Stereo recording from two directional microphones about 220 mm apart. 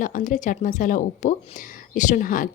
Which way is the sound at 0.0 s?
35° left (ahead or behind).